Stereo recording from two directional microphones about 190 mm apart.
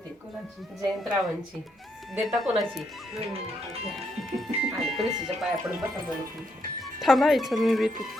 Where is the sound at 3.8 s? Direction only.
Centre (ahead or behind).